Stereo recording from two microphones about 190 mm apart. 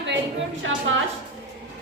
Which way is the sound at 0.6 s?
90° right.